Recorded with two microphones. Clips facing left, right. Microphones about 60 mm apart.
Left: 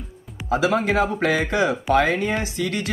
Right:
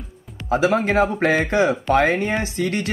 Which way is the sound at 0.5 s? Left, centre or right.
Right.